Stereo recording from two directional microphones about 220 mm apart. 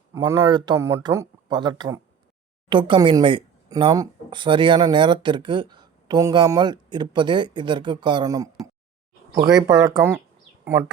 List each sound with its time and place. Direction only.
0.1 s speech: 15° right (ahead or behind)